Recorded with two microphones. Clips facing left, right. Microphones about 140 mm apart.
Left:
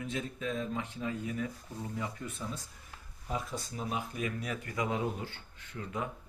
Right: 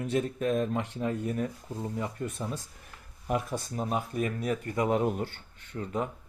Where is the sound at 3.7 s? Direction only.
45° right (ahead or behind).